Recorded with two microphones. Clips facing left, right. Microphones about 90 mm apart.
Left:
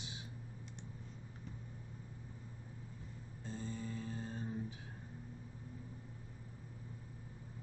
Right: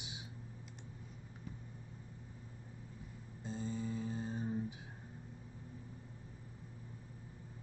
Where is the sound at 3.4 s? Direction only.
20° right (ahead or behind).